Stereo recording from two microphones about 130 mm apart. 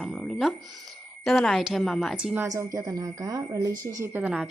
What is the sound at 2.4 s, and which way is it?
Speech, 25° right (ahead or behind).